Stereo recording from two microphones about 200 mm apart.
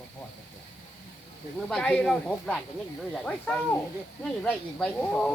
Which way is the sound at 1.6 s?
5° left (ahead or behind).